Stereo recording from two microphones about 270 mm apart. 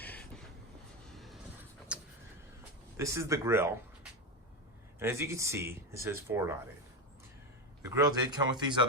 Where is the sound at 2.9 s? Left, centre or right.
Centre.